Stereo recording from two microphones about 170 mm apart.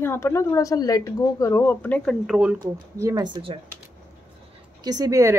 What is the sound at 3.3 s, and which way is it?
Speech, 30° right (ahead or behind).